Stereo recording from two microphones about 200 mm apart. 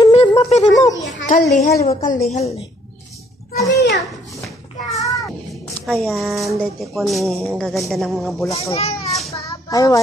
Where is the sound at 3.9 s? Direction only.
Centre (ahead or behind).